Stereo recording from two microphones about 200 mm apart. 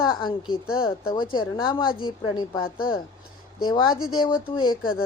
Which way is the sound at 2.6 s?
45° left (ahead or behind).